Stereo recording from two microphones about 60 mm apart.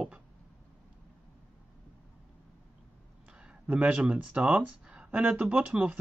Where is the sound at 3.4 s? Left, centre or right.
Centre.